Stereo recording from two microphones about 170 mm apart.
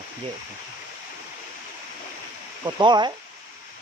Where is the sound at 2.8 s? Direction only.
25° right (ahead or behind).